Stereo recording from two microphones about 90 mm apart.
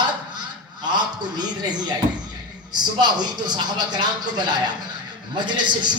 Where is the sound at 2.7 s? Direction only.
50° right (ahead or behind).